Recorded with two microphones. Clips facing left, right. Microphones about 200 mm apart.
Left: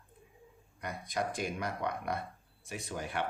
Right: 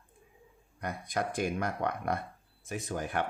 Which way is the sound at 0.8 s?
50° right (ahead or behind).